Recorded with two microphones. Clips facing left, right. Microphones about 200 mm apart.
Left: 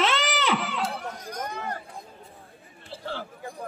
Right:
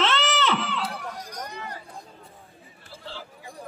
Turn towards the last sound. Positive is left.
turn(degrees=55)  # may be behind; listen again after turning